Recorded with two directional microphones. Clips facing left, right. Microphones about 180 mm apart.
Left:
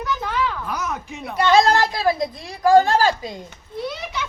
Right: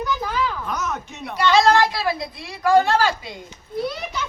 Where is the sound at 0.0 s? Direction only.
Centre (ahead or behind).